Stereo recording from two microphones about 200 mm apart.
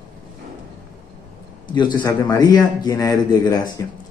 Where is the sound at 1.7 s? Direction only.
20° left (ahead or behind).